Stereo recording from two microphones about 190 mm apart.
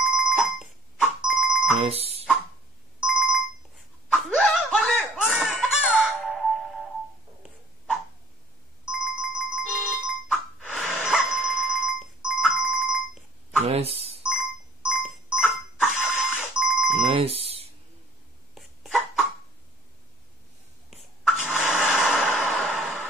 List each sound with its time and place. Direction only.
0.9 s music: 5° right (ahead or behind)
1.8 s speech: 35° right (ahead or behind)
3.0 s ringtone: 5° right (ahead or behind)
4.1 s laughter: centre (ahead or behind)
7.4 s dog: centre (ahead or behind)
8.9 s ringtone: 5° right (ahead or behind)
10.9 s dog: 5° right (ahead or behind)
13.7 s telephone dialing: 35° right (ahead or behind)
14.2 s music: 5° right (ahead or behind)
15.8 s a sound: 5° right (ahead or behind)
17.0 s alarm: 30° right (ahead or behind)
18.5 s a sound: centre (ahead or behind)
20.9 s a sound: centre (ahead or behind)